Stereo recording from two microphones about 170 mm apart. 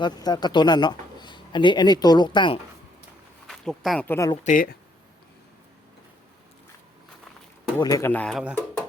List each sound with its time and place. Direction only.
0.0 s speech: 25° left (ahead or behind)
3.4 s speech: 5° left (ahead or behind)
4.4 s speech: 55° left (ahead or behind)
7.8 s speech: 20° left (ahead or behind)
8.1 s speech: 5° left (ahead or behind)